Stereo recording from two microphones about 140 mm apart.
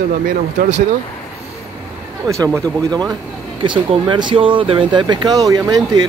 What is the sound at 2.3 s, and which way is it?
Speech, 25° right (ahead or behind).